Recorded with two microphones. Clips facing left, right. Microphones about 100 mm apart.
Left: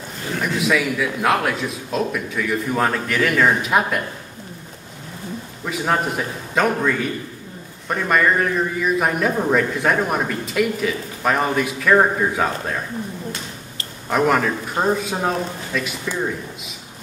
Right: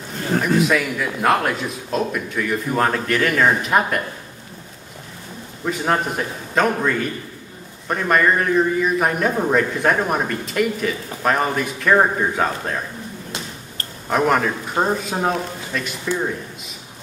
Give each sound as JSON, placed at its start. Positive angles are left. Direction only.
{"t": 0.6, "sound": "a man's voice", "side_deg": 0}
{"t": 5.7, "sound": "a man's voice", "side_deg": 0}
{"t": 14.0, "sound": "a man's voice", "side_deg": 0}